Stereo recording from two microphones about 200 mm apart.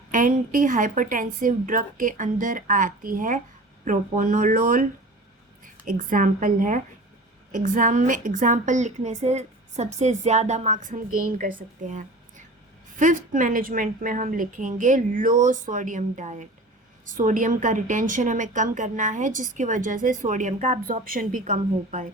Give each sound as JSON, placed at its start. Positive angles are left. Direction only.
{"t": 0.1, "sound": "a woman's voice", "side_deg": -40}